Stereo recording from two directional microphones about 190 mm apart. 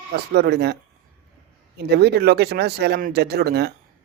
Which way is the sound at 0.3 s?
60° right (ahead or behind).